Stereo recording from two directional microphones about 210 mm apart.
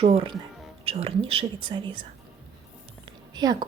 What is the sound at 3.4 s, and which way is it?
Speech, 20° right (ahead or behind).